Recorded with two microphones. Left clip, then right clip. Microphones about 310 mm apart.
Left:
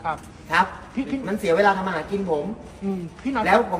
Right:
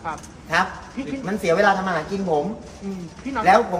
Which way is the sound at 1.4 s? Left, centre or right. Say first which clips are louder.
Right 1 dB; centre.